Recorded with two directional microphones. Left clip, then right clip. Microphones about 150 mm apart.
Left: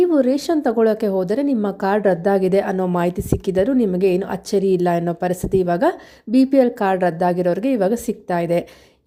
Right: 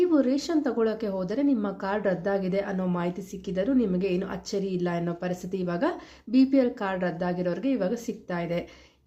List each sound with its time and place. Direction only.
0.0 s a woman's voice: 50° left (ahead or behind)